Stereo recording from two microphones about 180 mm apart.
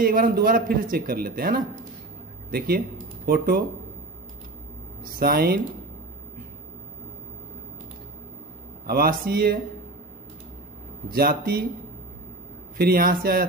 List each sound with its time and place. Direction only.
0.0 s a man's voice: 55° right (ahead or behind)
5.1 s a man's voice: 55° right (ahead or behind)
8.8 s a man's voice: 55° right (ahead or behind)
11.1 s a man's voice: 55° right (ahead or behind)
12.7 s a man's voice: 55° right (ahead or behind)